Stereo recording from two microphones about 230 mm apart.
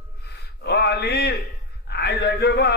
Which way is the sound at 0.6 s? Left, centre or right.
Left.